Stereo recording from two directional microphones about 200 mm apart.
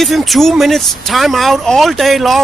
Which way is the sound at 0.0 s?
Centre (ahead or behind).